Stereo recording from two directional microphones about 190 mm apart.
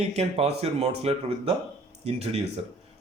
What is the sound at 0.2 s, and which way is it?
Speech, 35° right (ahead or behind).